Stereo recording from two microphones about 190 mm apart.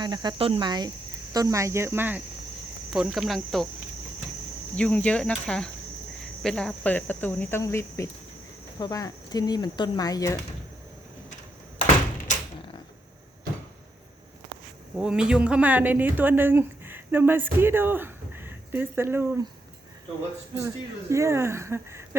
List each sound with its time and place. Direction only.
0.0 s speech: 20° right (ahead or behind); by 3.7 s centre (ahead or behind)
4.7 s speech: 5° left (ahead or behind)
14.9 s speech: 5° right (ahead or behind)
21.1 s speech: 15° right (ahead or behind)